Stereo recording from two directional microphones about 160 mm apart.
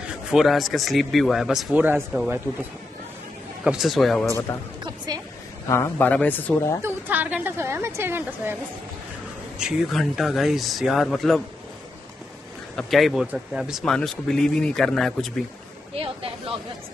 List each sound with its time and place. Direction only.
0.1 s speech: 5° right (ahead or behind)
3.6 s speech: centre (ahead or behind)
4.3 s a man's voice: 20° left (ahead or behind)
4.8 s a sound: 25° right (ahead or behind)
5.7 s a man's voice: 15° left (ahead or behind)
6.8 s a woman's voice: 10° right (ahead or behind)
9.6 s speech: centre (ahead or behind)
12.7 s speech: centre (ahead or behind)